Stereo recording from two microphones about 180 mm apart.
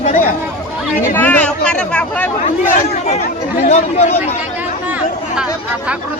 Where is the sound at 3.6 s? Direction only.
40° left (ahead or behind).